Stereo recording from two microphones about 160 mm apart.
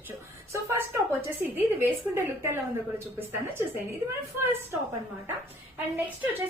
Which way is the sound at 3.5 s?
15° right (ahead or behind).